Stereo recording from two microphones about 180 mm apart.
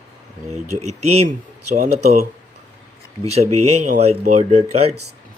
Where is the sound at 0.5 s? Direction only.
40° right (ahead or behind).